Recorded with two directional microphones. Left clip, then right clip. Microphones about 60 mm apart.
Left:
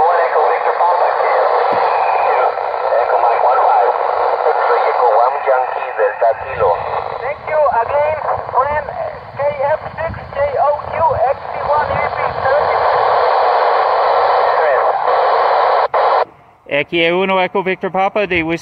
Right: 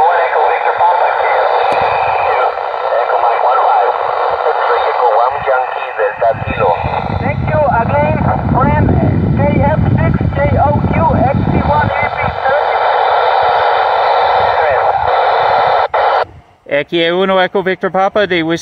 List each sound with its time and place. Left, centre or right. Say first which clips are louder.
0.0 s radio: right 2 dB; left
6.2 s vehicle: right 3 dB; left